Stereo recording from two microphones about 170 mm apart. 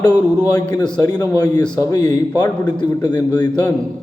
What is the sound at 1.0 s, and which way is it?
Speech, 25° left (ahead or behind).